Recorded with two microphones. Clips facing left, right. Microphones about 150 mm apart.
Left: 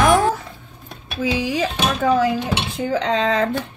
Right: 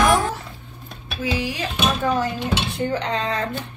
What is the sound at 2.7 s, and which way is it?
Speech, 90° left.